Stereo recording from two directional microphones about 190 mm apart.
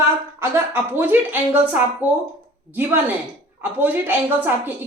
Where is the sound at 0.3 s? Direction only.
10° right (ahead or behind).